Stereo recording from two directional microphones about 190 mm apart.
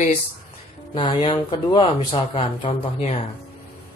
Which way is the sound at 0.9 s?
30° left (ahead or behind).